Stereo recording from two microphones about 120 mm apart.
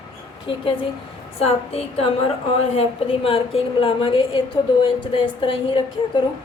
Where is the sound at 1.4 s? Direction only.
60° left (ahead or behind).